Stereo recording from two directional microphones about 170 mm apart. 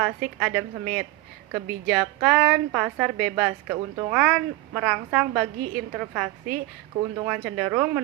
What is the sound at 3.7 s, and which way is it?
Speech, 20° right (ahead or behind).